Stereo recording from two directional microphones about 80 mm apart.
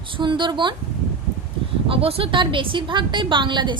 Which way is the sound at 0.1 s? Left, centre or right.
Right.